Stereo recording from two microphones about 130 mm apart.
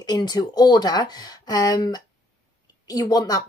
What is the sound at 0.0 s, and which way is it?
A woman's voice, 30° left (ahead or behind).